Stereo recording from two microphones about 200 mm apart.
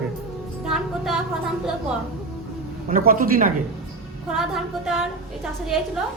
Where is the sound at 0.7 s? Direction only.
Centre (ahead or behind).